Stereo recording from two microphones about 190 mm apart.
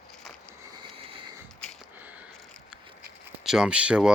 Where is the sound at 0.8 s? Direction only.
25° right (ahead or behind).